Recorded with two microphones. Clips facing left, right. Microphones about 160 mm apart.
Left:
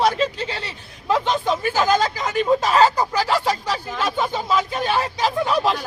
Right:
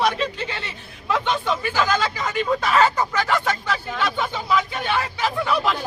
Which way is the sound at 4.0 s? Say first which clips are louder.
Left 4 dB; 40° left (ahead or behind).